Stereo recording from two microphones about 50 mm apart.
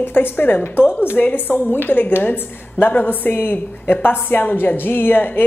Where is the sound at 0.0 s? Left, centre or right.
Left.